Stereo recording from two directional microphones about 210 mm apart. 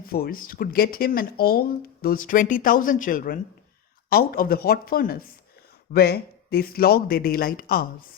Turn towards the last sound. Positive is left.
turn(degrees=45)  # may be behind; listen again after turning